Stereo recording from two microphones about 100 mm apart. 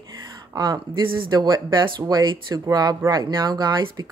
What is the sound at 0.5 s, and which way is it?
Speech, 40° right (ahead or behind).